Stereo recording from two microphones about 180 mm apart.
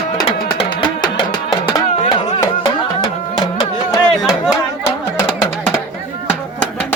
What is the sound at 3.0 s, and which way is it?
Music, 20° left (ahead or behind).